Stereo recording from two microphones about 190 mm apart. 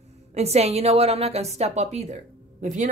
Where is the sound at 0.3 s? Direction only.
35° right (ahead or behind).